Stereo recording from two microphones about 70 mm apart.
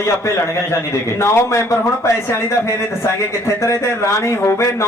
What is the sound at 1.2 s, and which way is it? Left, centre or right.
Speech, left.